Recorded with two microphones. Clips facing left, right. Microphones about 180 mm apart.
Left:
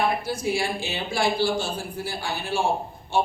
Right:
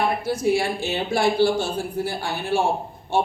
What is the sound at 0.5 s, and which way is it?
A man's voice, 60° right (ahead or behind).